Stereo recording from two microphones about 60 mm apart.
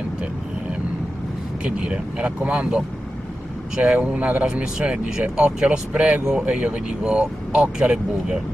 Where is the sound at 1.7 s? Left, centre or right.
Centre.